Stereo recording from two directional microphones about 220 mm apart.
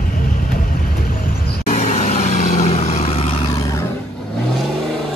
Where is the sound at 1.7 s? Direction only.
35° left (ahead or behind).